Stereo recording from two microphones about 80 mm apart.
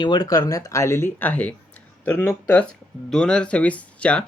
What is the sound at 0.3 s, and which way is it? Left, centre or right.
Speech, left.